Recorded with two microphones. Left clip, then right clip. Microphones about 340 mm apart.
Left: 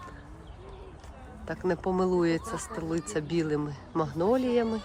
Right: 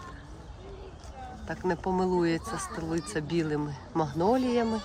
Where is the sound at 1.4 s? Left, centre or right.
Centre.